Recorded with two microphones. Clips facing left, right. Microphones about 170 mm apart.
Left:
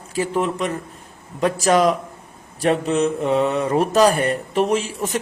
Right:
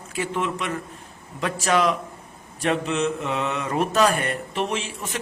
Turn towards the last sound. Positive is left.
turn(degrees=40)  # may be behind; listen again after turning